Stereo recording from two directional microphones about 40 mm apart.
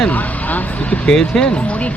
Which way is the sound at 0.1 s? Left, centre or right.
Left.